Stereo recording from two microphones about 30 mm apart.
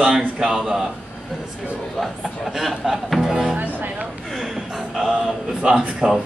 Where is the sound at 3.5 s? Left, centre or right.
Right.